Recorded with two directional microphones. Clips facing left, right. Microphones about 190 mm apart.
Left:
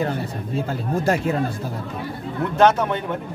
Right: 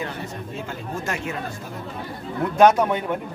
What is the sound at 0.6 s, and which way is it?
Speech, 35° left (ahead or behind).